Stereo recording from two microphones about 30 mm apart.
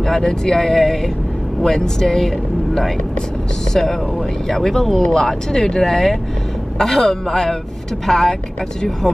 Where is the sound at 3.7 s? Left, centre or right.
Centre.